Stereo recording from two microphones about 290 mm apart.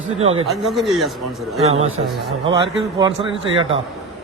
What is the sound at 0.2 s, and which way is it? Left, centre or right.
Speech, centre.